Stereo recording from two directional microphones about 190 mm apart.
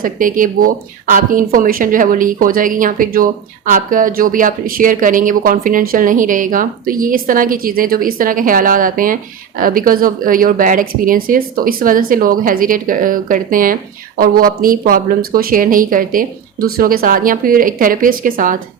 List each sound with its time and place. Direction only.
0.0 s speech: 45° right (ahead or behind)